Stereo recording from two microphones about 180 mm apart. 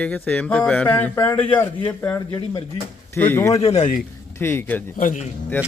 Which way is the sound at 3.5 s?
35° left (ahead or behind).